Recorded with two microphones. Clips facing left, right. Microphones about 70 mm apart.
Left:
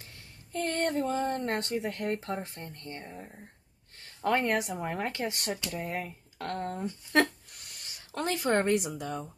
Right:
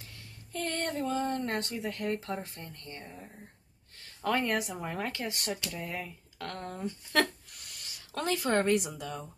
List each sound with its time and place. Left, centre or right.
0.5 s a woman's voice: left